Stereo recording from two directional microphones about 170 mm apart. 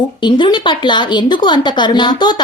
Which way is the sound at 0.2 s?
25° left (ahead or behind).